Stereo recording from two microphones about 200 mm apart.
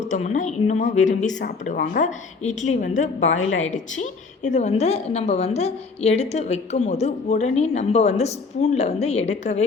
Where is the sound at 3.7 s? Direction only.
40° left (ahead or behind).